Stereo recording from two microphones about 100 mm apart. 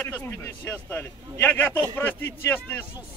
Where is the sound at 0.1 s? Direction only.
20° left (ahead or behind).